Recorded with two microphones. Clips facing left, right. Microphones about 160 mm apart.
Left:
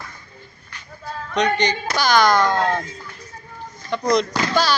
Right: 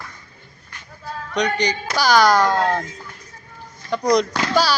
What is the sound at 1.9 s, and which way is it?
Speech, 10° right (ahead or behind).